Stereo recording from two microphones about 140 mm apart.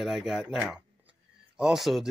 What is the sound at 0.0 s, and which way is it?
Speech, 5° right (ahead or behind).